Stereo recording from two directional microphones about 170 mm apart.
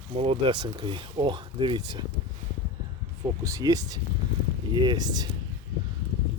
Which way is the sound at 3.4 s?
20° right (ahead or behind).